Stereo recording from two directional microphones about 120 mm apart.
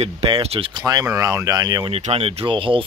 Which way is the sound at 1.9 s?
60° right (ahead or behind).